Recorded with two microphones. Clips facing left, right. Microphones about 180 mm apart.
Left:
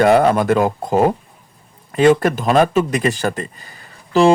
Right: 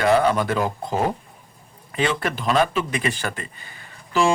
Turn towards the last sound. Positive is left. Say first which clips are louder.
# left 7 dB
turn(degrees=40)  # may be behind; listen again after turning